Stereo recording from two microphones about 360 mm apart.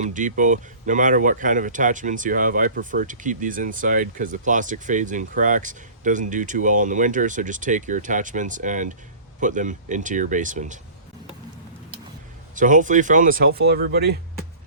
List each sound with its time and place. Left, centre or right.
0.0 s speech: right
12.5 s speech: right